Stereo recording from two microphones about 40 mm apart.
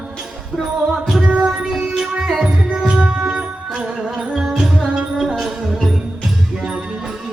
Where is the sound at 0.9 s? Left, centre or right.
Centre.